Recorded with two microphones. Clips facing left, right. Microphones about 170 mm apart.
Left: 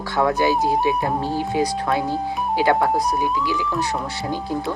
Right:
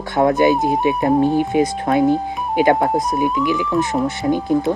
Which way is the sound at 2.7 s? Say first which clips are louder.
Right 2 dB; 40° right (ahead or behind).